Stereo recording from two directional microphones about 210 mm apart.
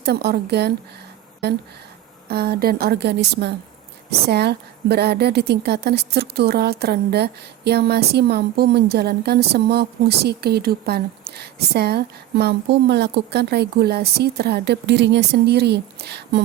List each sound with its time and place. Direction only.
0.0 s a woman's voice: 50° right (ahead or behind)
2.2 s a woman's voice: 50° right (ahead or behind)